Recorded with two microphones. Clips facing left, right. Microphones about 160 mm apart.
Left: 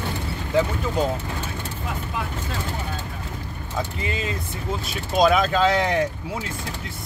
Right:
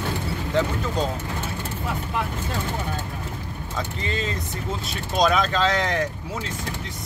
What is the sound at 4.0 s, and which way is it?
Speech, 10° left (ahead or behind).